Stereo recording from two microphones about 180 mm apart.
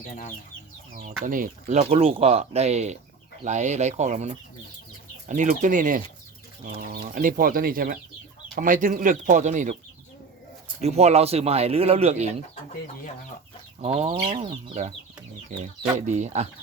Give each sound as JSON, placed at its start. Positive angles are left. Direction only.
{"t": 1.2, "sound": "speech", "side_deg": -50}
{"t": 10.8, "sound": "speech", "side_deg": -35}
{"t": 13.8, "sound": "speech", "side_deg": -35}
{"t": 16.0, "sound": "speech", "side_deg": -40}